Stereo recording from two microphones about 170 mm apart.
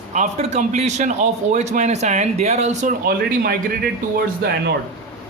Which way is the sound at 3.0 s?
65° right (ahead or behind).